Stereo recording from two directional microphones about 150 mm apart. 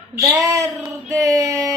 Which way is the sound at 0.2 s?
20° right (ahead or behind).